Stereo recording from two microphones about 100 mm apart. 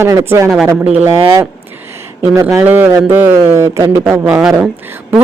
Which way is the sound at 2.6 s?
20° right (ahead or behind).